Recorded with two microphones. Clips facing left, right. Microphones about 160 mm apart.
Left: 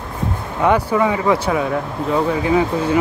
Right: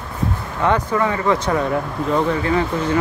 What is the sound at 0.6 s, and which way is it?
Speech, 10° left (ahead or behind).